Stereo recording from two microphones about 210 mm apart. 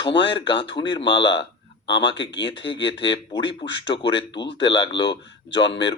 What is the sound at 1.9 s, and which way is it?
Speech, 55° left (ahead or behind).